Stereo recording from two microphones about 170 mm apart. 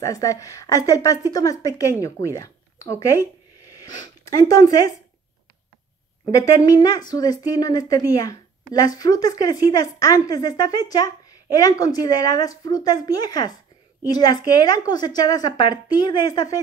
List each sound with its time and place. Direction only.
0.0 s a woman's voice: 20° left (ahead or behind)
6.3 s a woman's voice: 20° left (ahead or behind)